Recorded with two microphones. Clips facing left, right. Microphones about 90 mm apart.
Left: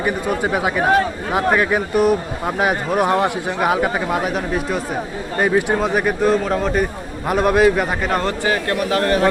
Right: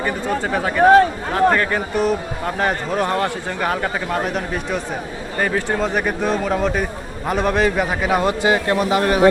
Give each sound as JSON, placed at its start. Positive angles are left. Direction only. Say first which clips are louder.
{"t": 0.0, "sound": "speech", "louder": "left 2 dB", "side_deg": 10}
{"t": 5.4, "sound": "speech", "louder": "left 3 dB", "side_deg": 15}
{"t": 8.2, "sound": "a man's voice", "louder": "right 2 dB", "side_deg": -15}